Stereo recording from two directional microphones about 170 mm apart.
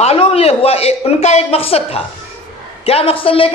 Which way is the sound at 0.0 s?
35° left (ahead or behind).